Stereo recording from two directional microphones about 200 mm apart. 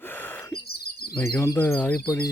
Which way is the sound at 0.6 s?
50° left (ahead or behind).